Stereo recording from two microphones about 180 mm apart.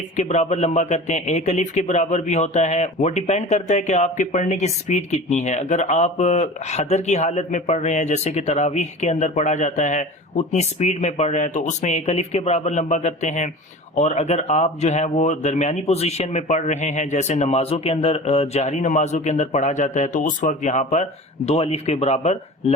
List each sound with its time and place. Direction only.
0.2 s a man's voice: 40° left (ahead or behind)